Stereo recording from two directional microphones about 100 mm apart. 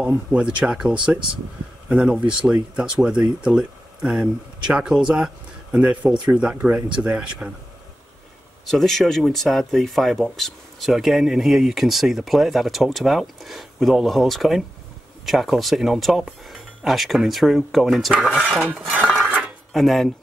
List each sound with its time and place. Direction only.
0.0 s speech: 10° right (ahead or behind)
8.6 s speech: 5° left (ahead or behind); by 19.1 s 15° right (ahead or behind)
19.4 s a sound: centre (ahead or behind)